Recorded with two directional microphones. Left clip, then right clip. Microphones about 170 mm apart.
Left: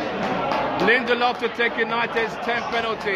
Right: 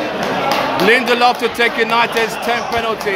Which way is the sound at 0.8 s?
20° right (ahead or behind).